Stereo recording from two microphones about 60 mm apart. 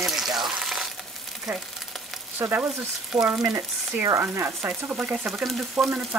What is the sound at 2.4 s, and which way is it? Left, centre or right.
Speech, right.